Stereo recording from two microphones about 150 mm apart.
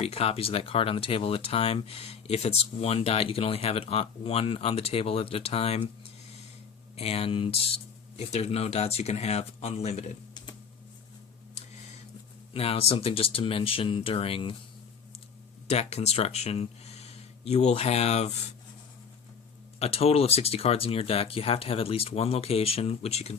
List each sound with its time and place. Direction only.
0.0 s speech: 40° left (ahead or behind)
6.9 s speech: 40° left (ahead or behind)
12.5 s speech: 40° left (ahead or behind)
15.6 s speech: 45° left (ahead or behind)
19.8 s speech: 40° left (ahead or behind)